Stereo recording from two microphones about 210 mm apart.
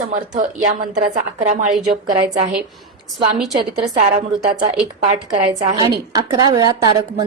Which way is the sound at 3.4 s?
Centre (ahead or behind).